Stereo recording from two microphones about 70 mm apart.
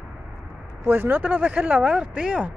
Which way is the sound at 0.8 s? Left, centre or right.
Right.